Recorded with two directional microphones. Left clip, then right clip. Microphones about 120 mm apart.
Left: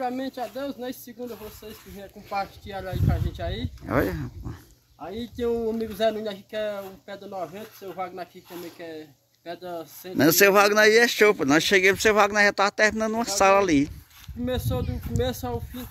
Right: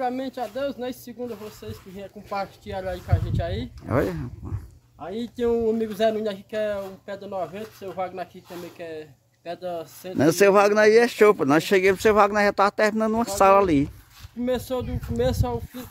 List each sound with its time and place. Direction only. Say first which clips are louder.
0.0 s speech: right 2 dB; 20° right (ahead or behind)
2.2 s speech: even; 30° right (ahead or behind)
3.8 s speech: even; centre (ahead or behind)
5.0 s speech: right 3 dB; 25° right (ahead or behind); by 10.1 s 45° right (ahead or behind)
10.1 s speech: even; 5° left (ahead or behind)
14.4 s speech: right 3 dB; 30° right (ahead or behind)